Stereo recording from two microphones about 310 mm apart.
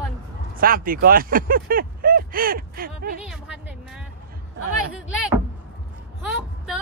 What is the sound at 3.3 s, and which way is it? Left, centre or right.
Music, centre.